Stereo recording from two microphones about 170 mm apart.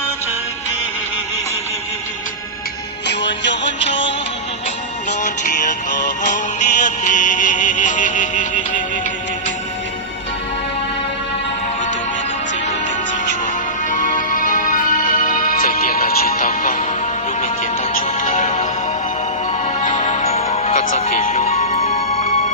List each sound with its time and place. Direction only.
3.1 s music: 90° left
5.2 s music: 45° left (ahead or behind)
13.9 s music: 50° left (ahead or behind)
18.2 s music: 45° left (ahead or behind)
19.8 s music: 45° left (ahead or behind)